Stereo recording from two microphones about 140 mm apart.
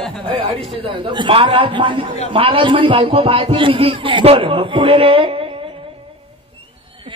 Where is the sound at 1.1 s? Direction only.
35° right (ahead or behind).